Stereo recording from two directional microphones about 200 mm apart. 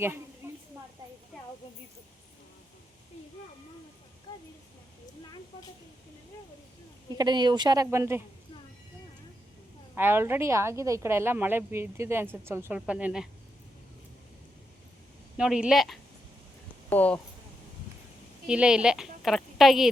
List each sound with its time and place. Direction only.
4.3 s speech: 20° left (ahead or behind)
7.2 s speech: 20° right (ahead or behind)
9.9 s a woman's voice: 10° right (ahead or behind)
15.4 s a woman's voice: 5° right (ahead or behind)
18.4 s a woman's voice: 5° right (ahead or behind)